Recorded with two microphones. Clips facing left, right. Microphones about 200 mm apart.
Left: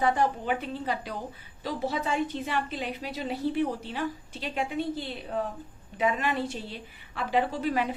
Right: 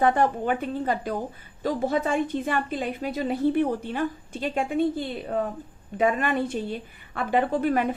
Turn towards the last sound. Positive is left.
turn(degrees=-55)  # may be behind; listen again after turning